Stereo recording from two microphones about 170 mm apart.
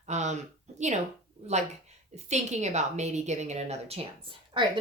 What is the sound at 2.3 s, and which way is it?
A woman's voice, 40° right (ahead or behind).